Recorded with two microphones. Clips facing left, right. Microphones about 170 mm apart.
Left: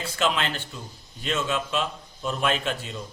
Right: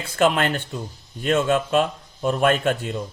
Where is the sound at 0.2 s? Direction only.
50° right (ahead or behind).